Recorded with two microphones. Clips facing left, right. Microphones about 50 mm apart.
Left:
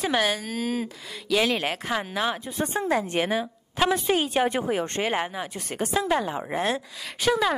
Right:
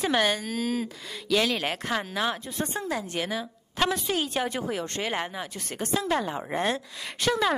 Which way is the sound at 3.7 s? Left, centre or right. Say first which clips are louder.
Left 3 dB; centre.